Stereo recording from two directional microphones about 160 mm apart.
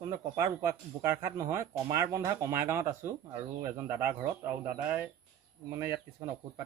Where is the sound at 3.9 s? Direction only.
15° right (ahead or behind).